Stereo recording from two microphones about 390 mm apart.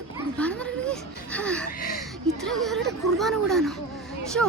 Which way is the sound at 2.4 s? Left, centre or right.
Centre.